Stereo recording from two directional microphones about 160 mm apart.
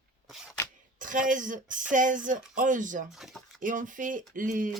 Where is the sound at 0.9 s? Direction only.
55° right (ahead or behind).